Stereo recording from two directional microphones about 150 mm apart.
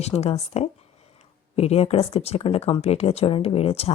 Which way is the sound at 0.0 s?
45° left (ahead or behind).